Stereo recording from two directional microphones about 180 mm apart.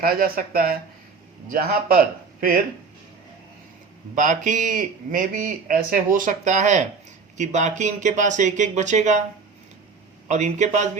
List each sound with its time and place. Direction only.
0.0 s a man's voice: 55° right (ahead or behind)
4.1 s a man's voice: 45° right (ahead or behind)
10.2 s a man's voice: 40° right (ahead or behind)